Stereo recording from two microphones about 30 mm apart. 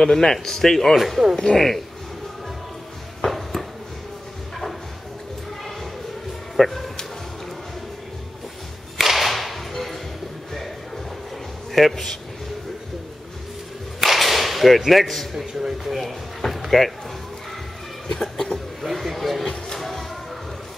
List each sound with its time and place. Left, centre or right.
0.0 s speech: left
0.9 s a man's voice: centre
1.3 s speech: centre
3.3 s a sound: centre
6.5 s speech: centre
8.9 s whip: centre
11.9 s speech: centre
14.0 s whip: centre
14.9 s a man's voice: centre
18.0 s cough: centre
18.8 s a sound: centre